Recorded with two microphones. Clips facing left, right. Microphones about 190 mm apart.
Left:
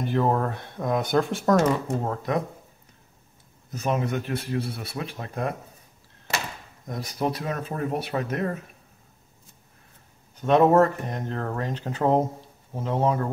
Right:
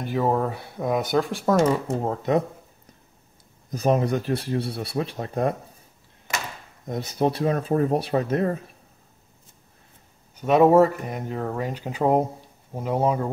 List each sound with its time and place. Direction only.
0.0 s speech: 5° right (ahead or behind)
2.0 s speech: 25° right (ahead or behind)
3.7 s speech: 35° right (ahead or behind)
6.9 s speech: 25° right (ahead or behind)
10.4 s speech: 10° right (ahead or behind)